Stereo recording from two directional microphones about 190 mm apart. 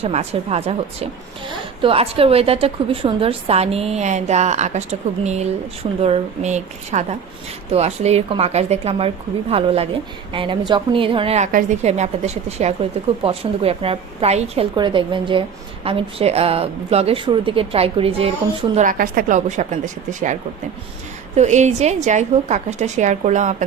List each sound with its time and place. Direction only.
0.0 s a woman's voice: 35° right (ahead or behind)
18.7 s a woman's voice: 40° right (ahead or behind)
21.3 s a woman's voice: 35° right (ahead or behind)